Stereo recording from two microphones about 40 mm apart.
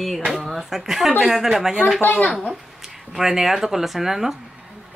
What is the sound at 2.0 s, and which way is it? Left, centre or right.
Speech, left.